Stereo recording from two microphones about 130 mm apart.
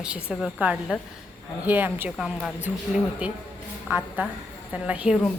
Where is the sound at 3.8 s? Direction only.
10° right (ahead or behind).